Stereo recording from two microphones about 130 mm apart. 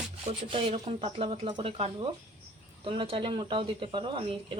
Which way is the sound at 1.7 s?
50° right (ahead or behind).